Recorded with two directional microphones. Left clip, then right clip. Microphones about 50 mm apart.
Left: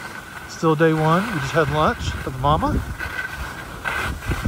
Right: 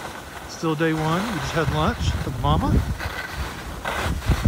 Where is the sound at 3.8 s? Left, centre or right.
Right.